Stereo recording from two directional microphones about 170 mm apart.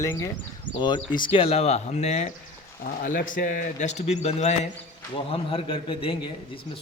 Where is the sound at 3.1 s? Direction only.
55° left (ahead or behind).